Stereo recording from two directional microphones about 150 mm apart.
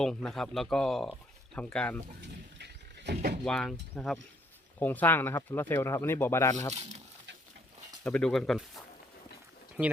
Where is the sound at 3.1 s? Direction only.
90° right.